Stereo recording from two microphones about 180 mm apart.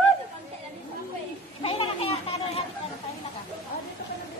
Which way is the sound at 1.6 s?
30° left (ahead or behind).